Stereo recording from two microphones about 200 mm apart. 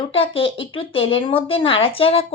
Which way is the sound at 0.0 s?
25° left (ahead or behind).